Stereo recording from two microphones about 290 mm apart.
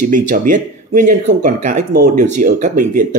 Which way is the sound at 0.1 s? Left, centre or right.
Right.